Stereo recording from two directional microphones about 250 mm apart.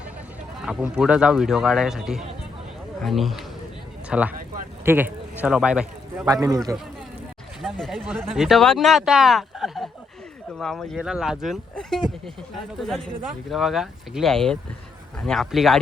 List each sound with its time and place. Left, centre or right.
0.6 s speech: centre
7.6 s speech: centre